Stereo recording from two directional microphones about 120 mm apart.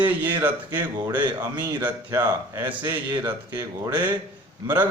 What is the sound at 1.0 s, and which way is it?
Speech, 40° right (ahead or behind).